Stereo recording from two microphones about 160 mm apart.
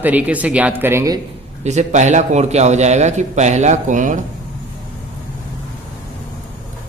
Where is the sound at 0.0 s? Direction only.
10° right (ahead or behind).